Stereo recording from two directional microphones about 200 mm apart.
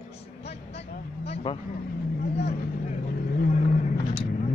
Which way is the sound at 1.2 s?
30° left (ahead or behind).